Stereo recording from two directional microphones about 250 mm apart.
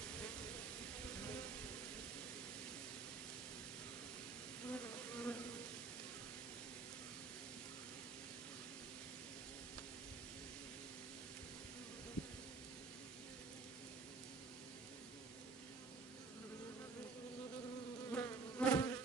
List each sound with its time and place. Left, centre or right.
4.6 s bee: centre
18.1 s bee: centre